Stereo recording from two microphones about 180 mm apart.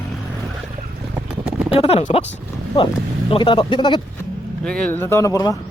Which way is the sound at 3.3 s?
30° left (ahead or behind).